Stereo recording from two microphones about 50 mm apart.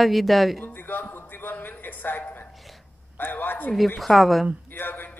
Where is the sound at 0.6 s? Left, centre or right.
Left.